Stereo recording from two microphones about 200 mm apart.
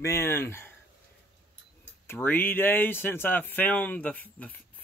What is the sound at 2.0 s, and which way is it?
Speech, 10° left (ahead or behind).